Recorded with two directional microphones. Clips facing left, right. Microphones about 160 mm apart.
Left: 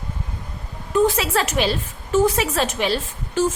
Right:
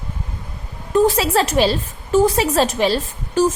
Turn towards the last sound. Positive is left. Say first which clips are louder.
# right 4 dB
turn(degrees=-35)  # may be behind; listen again after turning